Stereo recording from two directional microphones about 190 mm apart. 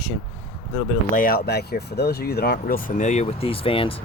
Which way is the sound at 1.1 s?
50° left (ahead or behind).